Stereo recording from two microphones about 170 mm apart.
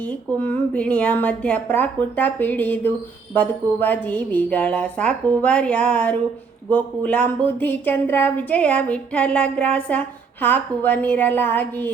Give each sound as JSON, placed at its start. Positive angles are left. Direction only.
{"t": 0.0, "sound": "speech", "side_deg": 10}